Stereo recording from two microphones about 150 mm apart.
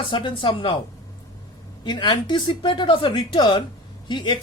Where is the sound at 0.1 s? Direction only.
30° left (ahead or behind).